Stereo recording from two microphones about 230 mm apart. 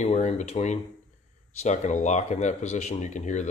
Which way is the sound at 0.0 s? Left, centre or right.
Left.